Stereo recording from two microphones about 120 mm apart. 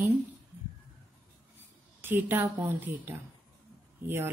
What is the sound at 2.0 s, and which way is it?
Speech, 15° right (ahead or behind).